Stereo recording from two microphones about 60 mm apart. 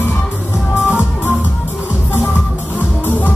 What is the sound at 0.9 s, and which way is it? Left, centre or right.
Music, left.